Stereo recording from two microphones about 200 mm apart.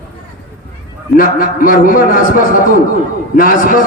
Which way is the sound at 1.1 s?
45° left (ahead or behind).